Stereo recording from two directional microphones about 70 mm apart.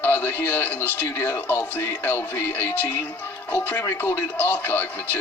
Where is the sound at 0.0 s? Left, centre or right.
Left.